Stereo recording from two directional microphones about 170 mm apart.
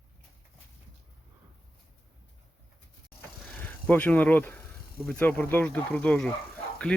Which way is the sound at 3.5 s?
10° left (ahead or behind).